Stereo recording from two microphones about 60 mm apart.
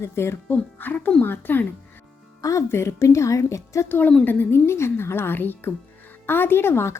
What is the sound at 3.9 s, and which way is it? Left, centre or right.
Speech, left.